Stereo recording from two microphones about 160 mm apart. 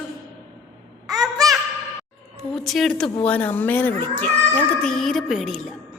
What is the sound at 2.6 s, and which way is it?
Speech, centre (ahead or behind).